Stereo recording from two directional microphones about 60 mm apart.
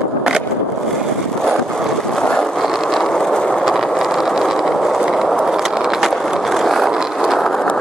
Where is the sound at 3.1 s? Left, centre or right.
Centre.